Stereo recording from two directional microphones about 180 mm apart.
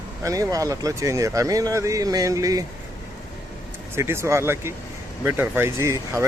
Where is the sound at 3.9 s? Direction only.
15° right (ahead or behind).